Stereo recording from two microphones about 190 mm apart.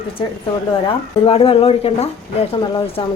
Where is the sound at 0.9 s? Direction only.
30° left (ahead or behind).